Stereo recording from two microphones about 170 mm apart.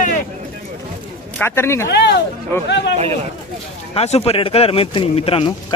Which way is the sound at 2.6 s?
90° left.